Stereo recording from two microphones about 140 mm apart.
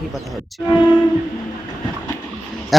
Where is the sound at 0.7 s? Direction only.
30° left (ahead or behind).